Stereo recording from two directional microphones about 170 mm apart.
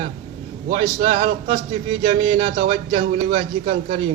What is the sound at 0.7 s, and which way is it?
Speech, 45° right (ahead or behind).